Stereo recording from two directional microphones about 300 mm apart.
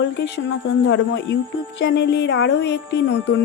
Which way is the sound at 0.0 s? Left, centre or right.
Left.